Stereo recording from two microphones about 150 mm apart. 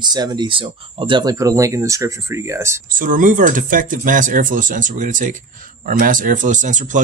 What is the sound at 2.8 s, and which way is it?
Speech, 65° right (ahead or behind).